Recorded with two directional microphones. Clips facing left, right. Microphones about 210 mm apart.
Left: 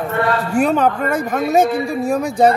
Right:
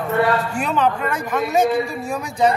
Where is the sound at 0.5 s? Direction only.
50° left (ahead or behind).